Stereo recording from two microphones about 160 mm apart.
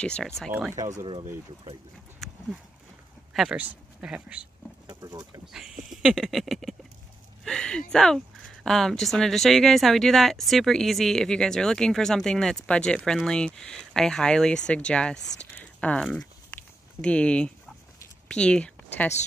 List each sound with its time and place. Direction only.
0.0 s speech: 5° left (ahead or behind)
0.5 s speech: 10° right (ahead or behind)
2.2 s horse: centre (ahead or behind)
3.3 s speech: 5° right (ahead or behind)
4.8 s speech: 20° right (ahead or behind)
5.9 s speech: centre (ahead or behind)
15.5 s a sound: 10° left (ahead or behind)
17.0 s speech: 5° left (ahead or behind)